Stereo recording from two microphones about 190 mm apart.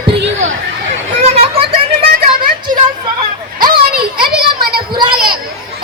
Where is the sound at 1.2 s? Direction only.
35° right (ahead or behind).